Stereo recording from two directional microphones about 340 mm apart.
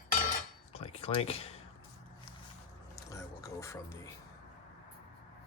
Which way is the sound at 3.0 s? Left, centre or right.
Centre.